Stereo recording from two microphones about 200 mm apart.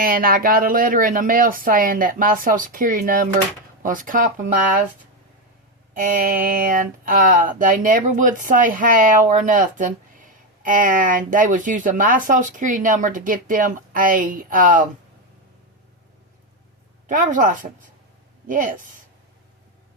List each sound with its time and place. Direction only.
0.0 s speech: 45° right (ahead or behind)
5.9 s speech: 40° right (ahead or behind)
17.1 s speech: 40° right (ahead or behind)